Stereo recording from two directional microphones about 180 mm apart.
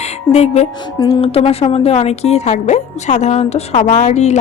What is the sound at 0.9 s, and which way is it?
A woman's voice, 35° left (ahead or behind).